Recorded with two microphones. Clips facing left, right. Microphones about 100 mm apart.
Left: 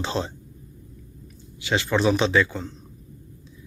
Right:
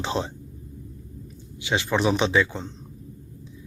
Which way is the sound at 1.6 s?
15° right (ahead or behind).